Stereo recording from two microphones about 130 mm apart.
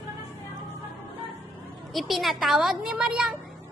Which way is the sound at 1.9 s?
Centre (ahead or behind).